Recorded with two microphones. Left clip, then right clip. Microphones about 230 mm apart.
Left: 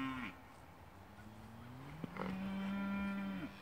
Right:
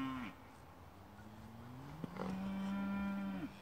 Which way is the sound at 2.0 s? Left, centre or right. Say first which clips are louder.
Left 1 dB; centre.